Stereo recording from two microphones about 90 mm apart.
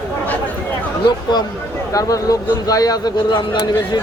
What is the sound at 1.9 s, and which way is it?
A man's voice, 40° left (ahead or behind).